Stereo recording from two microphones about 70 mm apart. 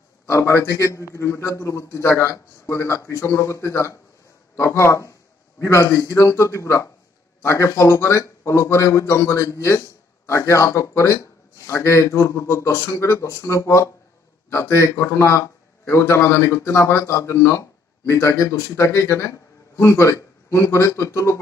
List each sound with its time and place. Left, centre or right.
0.3 s a man's voice: left